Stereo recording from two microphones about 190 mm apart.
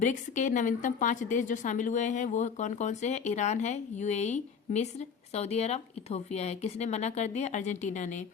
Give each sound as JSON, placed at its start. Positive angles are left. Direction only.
{"t": 0.0, "sound": "a woman's voice", "side_deg": 40}